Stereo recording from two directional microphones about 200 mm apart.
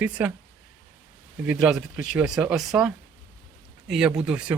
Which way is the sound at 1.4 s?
5° right (ahead or behind).